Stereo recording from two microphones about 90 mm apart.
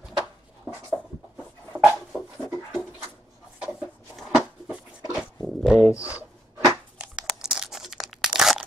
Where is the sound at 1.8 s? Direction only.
5° left (ahead or behind).